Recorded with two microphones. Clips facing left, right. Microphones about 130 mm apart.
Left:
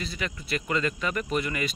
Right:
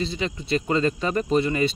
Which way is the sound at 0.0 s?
25° right (ahead or behind).